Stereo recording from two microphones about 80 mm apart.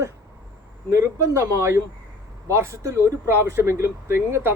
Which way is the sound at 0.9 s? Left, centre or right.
Right.